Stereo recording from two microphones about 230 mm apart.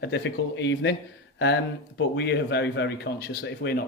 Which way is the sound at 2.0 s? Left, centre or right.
Left.